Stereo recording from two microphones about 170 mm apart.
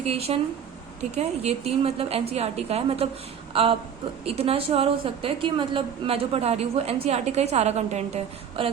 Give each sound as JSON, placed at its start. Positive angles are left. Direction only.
{"t": 0.0, "sound": "a woman's voice", "side_deg": -35}